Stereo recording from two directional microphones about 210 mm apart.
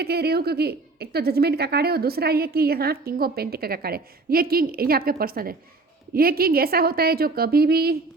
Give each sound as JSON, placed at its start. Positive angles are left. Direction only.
{"t": 0.0, "sound": "a woman's voice", "side_deg": -50}